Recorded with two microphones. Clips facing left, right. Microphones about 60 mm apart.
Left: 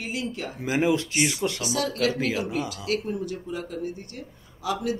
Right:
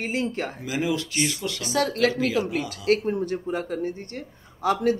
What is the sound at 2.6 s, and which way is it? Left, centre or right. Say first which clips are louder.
Speech: right 5 dB; right.